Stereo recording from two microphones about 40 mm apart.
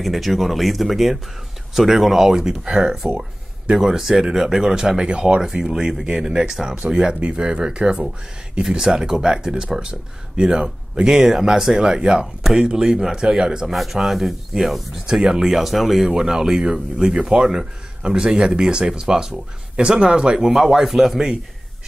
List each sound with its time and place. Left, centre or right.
0.0 s speech: centre
7.2 s speech: right
14.0 s speech: centre; by 20.3 s right
20.3 s speech: centre